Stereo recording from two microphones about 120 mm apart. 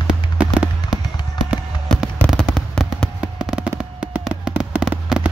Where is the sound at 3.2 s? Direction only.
10° right (ahead or behind).